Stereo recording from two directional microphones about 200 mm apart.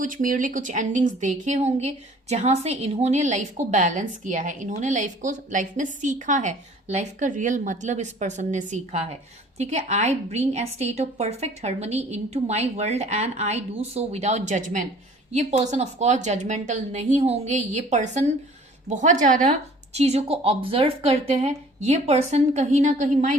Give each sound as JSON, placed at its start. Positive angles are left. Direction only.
{"t": 0.0, "sound": "a woman's voice", "side_deg": -40}